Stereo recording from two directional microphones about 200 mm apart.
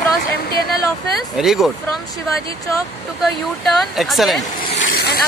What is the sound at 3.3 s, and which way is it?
Speech, centre (ahead or behind).